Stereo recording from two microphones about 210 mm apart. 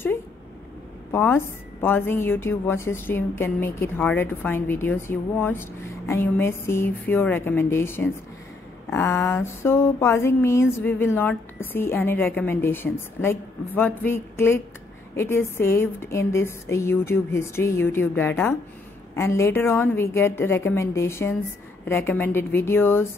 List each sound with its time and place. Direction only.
1.1 s a woman's voice: 10° left (ahead or behind)